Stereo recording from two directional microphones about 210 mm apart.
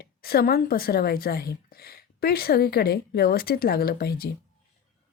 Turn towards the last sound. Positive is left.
turn(degrees=50)  # may be behind; listen again after turning